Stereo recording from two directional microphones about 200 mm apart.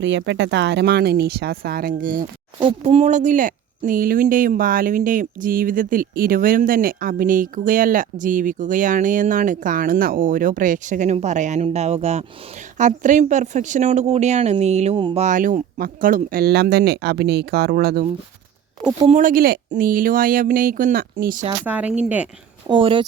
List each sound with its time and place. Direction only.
0.0 s speech: 65° right (ahead or behind); by 2.2 s 45° right (ahead or behind)
2.6 s speech: 30° right (ahead or behind); by 18.0 s 50° right (ahead or behind)
19.0 s speech: 40° right (ahead or behind)
21.6 s speech: 5° right (ahead or behind)
22.7 s speech: 25° right (ahead or behind)